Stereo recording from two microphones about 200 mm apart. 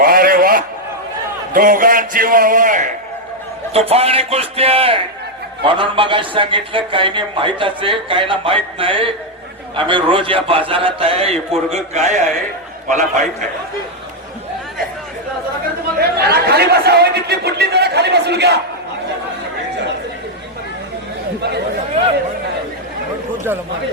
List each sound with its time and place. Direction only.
0.0 s a sound: 45° right (ahead or behind)
1.5 s a man's voice: 45° right (ahead or behind)
3.7 s a man's voice: 30° right (ahead or behind)
16.0 s a man's voice: 50° right (ahead or behind)